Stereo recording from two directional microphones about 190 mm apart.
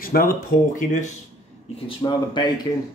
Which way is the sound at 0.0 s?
50° left (ahead or behind).